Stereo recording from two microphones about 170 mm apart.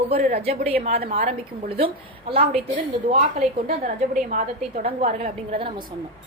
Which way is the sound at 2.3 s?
35° right (ahead or behind).